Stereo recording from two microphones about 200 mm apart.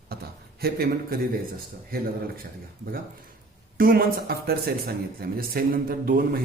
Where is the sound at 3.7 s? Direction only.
45° right (ahead or behind).